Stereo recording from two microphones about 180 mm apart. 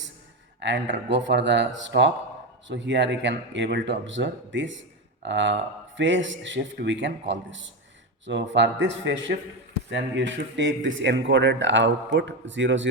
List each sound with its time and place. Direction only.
0.6 s a man's voice: 80° right